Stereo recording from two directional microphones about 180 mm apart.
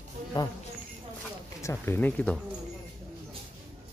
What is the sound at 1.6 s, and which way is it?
Speech, 15° left (ahead or behind).